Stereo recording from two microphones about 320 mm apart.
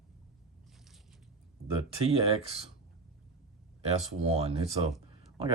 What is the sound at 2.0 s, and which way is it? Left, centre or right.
Speech, centre.